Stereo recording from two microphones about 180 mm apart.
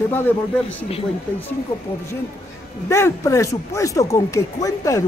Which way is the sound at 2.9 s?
15° left (ahead or behind).